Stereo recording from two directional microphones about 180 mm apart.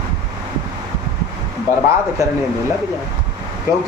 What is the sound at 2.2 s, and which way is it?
Speech, 15° right (ahead or behind).